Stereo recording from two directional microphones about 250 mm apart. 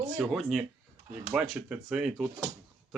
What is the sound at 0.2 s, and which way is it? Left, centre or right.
Speech, centre.